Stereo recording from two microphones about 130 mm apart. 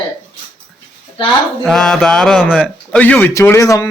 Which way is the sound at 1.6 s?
5° left (ahead or behind).